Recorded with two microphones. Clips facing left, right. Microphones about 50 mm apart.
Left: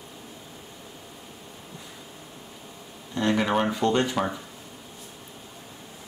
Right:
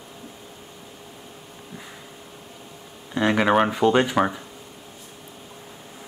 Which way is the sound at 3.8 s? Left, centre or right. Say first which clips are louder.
Right 5 dB; centre.